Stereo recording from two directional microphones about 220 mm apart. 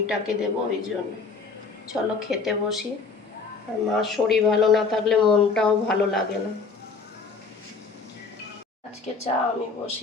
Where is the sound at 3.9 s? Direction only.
Centre (ahead or behind).